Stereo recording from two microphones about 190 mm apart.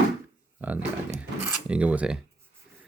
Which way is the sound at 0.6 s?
10° right (ahead or behind).